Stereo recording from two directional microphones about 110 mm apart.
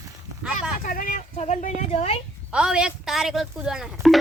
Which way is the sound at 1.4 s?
85° left.